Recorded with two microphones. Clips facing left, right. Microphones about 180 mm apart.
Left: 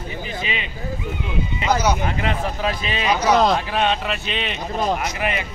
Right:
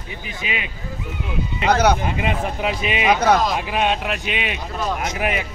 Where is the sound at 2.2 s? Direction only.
15° right (ahead or behind).